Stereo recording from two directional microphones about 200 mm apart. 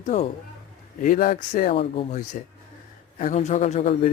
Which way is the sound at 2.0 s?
35° left (ahead or behind).